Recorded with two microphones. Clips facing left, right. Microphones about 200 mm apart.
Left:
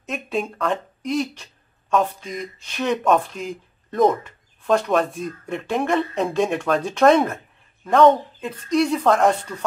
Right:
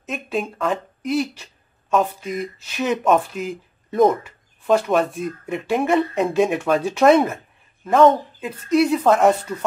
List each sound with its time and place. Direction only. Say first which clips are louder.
0.0 s speech: even; centre (ahead or behind)